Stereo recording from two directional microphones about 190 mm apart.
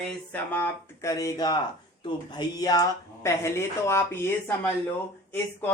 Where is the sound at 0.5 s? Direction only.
15° left (ahead or behind).